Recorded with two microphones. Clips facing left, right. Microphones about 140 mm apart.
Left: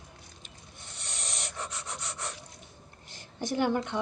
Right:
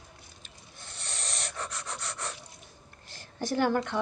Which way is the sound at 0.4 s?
20° left (ahead or behind).